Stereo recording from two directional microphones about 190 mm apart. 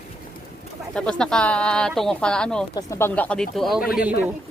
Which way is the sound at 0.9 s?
5° left (ahead or behind).